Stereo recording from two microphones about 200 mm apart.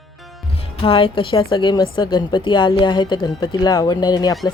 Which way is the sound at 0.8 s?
25° left (ahead or behind).